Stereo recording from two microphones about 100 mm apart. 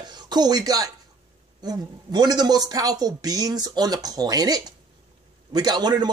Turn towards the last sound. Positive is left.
turn(degrees=-45)  # may be behind; listen again after turning